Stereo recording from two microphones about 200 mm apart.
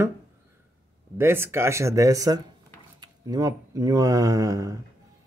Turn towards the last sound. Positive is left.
turn(degrees=-15)  # may be behind; listen again after turning